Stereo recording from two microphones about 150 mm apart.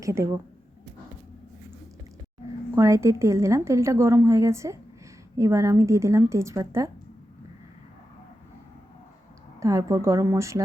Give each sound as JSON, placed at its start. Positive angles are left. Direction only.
{"t": 0.0, "sound": "a woman's voice", "side_deg": -20}
{"t": 2.7, "sound": "a woman's voice", "side_deg": -20}
{"t": 9.6, "sound": "a woman's voice", "side_deg": -20}